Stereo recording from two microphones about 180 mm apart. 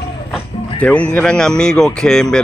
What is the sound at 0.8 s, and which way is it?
Speech, 5° left (ahead or behind).